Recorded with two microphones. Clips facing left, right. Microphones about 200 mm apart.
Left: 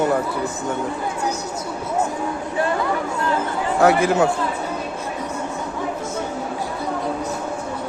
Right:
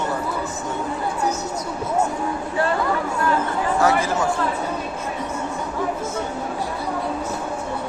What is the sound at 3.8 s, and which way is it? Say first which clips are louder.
Speech: left 6 dB; 60° left (ahead or behind).